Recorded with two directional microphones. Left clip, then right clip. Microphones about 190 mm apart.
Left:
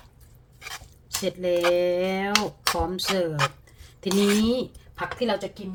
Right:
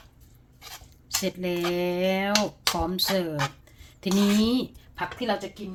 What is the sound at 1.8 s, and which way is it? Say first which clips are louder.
Dishes: left 1 dB; 40° right (ahead or behind).